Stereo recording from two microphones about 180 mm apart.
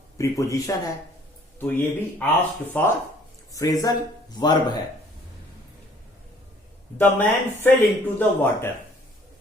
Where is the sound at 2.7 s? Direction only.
10° left (ahead or behind).